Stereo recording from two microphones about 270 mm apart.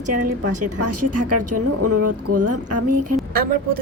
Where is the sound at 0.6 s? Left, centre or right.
Right.